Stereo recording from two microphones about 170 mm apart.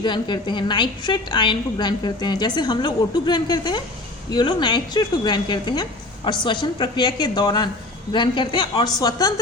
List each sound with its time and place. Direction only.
0.0 s a woman's voice: 25° left (ahead or behind)